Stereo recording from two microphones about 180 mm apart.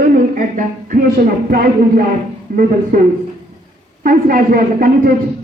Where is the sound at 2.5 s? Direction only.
50° right (ahead or behind).